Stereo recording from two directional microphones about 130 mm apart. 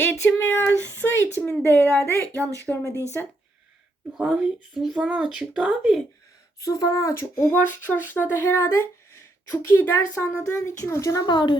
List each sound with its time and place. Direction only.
0.0 s a woman's voice: 15° left (ahead or behind)
4.2 s speech: 5° right (ahead or behind)
6.6 s speech: 25° left (ahead or behind)